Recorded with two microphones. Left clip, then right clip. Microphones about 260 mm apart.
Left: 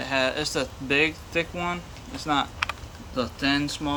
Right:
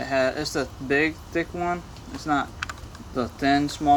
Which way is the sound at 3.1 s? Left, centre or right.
Centre.